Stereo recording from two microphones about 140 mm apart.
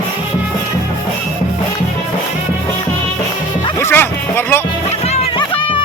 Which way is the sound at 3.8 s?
15° left (ahead or behind).